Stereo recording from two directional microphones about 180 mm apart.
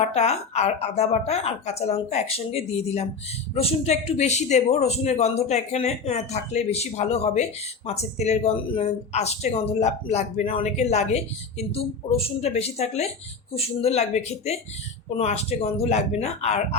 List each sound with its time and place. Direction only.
0.0 s speech: 35° left (ahead or behind)